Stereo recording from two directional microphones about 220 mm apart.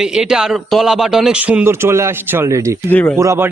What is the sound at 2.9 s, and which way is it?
Speech, 5° left (ahead or behind).